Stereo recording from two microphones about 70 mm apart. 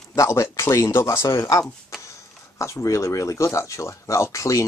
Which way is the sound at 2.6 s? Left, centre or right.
Left.